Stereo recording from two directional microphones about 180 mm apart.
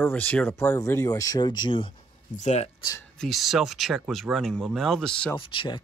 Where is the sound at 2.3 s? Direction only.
40° left (ahead or behind).